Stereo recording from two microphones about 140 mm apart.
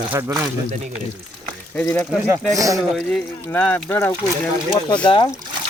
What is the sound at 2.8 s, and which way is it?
Speech, centre (ahead or behind).